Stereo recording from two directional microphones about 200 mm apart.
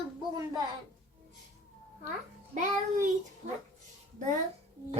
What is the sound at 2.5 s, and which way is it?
Speech, 40° right (ahead or behind).